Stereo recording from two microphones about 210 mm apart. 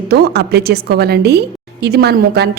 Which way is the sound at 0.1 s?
50° right (ahead or behind).